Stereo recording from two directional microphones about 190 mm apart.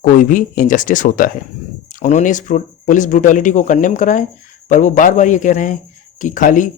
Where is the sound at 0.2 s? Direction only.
45° left (ahead or behind).